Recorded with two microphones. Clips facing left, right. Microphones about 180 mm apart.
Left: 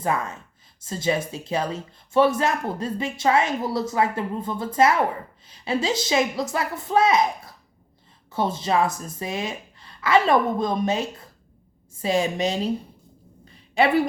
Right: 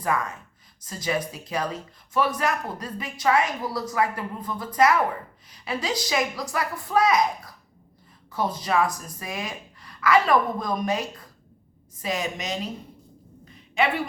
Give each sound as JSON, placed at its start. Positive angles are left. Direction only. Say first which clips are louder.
{"t": 0.0, "sound": "a woman's voice", "louder": "left 1 dB", "side_deg": 25}
{"t": 13.7, "sound": "a woman's voice", "louder": "left 5 dB", "side_deg": 35}